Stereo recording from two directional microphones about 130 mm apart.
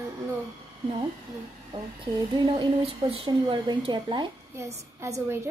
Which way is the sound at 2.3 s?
35° right (ahead or behind).